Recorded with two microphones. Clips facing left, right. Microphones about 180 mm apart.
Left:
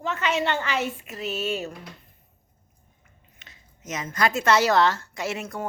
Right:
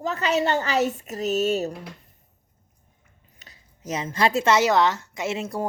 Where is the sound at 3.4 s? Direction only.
35° right (ahead or behind).